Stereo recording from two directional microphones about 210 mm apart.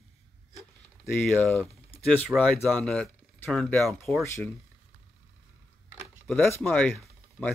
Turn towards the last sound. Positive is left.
turn(degrees=5)  # may be behind; listen again after turning